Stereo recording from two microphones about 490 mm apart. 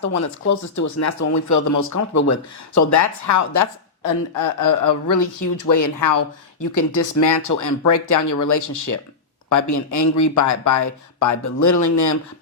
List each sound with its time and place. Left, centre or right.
0.0 s speech: left